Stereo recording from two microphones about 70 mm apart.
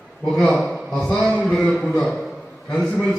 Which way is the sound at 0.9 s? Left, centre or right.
Centre.